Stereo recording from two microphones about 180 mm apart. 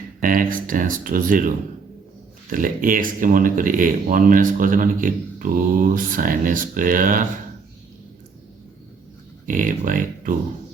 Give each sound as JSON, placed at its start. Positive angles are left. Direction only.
{"t": 0.2, "sound": "speech", "side_deg": -50}
{"t": 9.5, "sound": "speech", "side_deg": -45}